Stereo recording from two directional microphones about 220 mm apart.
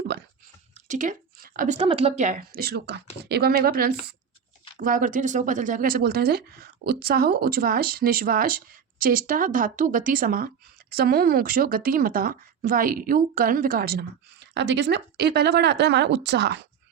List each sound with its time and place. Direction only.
0.7 s a woman's voice: 35° right (ahead or behind); by 16.6 s 50° right (ahead or behind)